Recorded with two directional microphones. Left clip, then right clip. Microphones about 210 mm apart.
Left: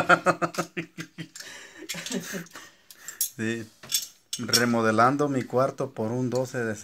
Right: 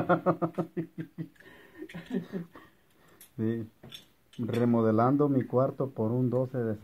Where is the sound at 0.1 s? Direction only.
10° left (ahead or behind).